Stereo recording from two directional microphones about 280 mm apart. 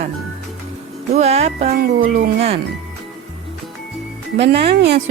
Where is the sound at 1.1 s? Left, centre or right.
Right.